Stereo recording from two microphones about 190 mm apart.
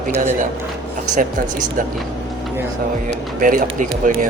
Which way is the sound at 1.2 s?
40° right (ahead or behind).